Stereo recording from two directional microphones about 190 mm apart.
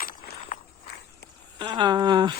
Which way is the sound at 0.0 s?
45° left (ahead or behind).